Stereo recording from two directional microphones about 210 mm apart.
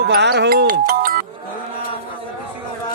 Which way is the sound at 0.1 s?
55° right (ahead or behind).